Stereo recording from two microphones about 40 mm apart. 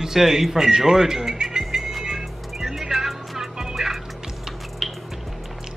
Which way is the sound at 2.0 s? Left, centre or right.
Centre.